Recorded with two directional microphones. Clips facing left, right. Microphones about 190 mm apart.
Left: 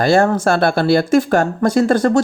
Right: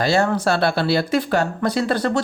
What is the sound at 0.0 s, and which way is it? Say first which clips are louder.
Speech: left 5 dB; 50° left (ahead or behind).